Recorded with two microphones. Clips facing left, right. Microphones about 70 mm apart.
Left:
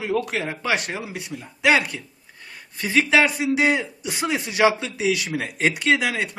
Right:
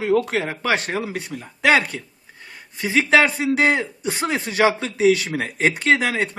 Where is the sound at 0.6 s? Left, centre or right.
Right.